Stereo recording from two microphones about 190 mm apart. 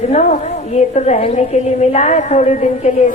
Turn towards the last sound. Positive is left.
turn(degrees=40)  # may be behind; listen again after turning